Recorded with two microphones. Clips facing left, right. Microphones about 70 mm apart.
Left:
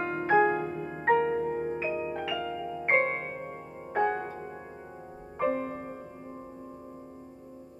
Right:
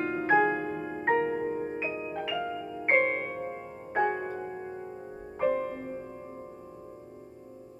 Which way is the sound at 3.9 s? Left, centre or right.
Centre.